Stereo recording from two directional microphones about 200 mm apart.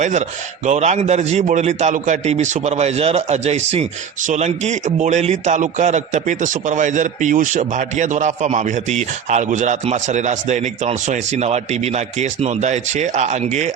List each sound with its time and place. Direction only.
0.0 s a man's voice: 35° right (ahead or behind)